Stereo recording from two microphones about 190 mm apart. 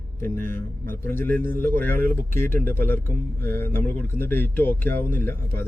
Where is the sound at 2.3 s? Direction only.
50° right (ahead or behind).